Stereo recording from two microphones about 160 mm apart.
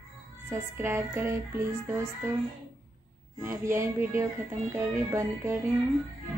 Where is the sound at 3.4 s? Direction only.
15° right (ahead or behind).